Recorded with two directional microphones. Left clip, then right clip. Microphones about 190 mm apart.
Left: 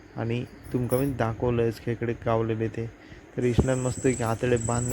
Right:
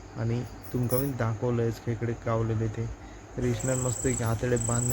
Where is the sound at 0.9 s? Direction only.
25° left (ahead or behind).